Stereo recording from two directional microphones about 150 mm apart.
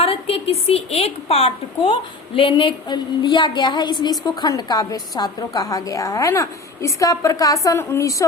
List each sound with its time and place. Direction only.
0.0 s a woman's voice: 40° left (ahead or behind); by 8.1 s 20° left (ahead or behind)